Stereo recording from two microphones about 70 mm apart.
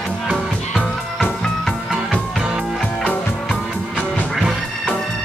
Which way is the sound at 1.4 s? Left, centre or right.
Centre.